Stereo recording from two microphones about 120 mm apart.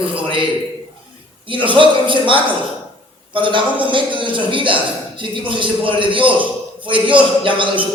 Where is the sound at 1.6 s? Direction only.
45° right (ahead or behind).